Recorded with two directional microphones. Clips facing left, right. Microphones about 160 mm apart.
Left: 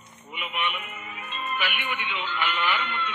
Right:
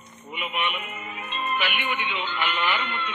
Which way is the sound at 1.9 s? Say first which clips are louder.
Right 2 dB; 25° right (ahead or behind).